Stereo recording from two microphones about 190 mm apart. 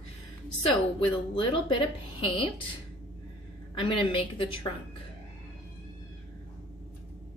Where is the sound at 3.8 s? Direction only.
25° left (ahead or behind).